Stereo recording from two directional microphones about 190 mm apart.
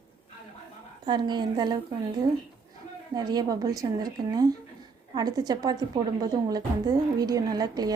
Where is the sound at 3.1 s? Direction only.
20° right (ahead or behind).